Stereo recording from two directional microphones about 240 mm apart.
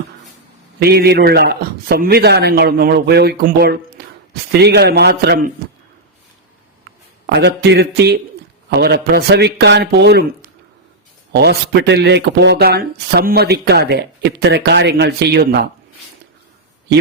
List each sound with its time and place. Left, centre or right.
0.8 s speech: right
7.3 s speech: right
11.3 s speech: right